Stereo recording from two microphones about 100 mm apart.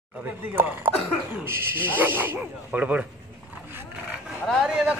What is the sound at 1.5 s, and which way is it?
Speech, 20° right (ahead or behind).